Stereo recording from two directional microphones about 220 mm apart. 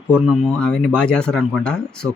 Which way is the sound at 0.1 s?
Centre (ahead or behind).